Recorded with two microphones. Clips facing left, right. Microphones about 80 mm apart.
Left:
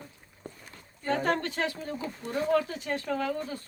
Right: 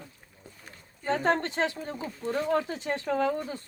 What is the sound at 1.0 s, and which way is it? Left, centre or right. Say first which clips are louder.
Speech: right 2 dB; right.